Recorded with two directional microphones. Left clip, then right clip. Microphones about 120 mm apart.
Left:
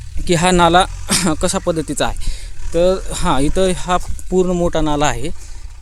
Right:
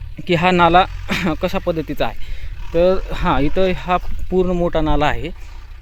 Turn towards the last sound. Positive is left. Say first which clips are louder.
# left 1 dB
turn(degrees=35)  # may be behind; listen again after turning